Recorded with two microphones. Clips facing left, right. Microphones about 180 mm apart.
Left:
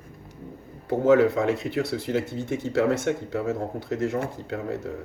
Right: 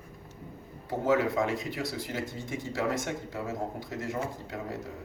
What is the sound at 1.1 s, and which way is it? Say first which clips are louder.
Speech: left 7 dB; 65° left (ahead or behind).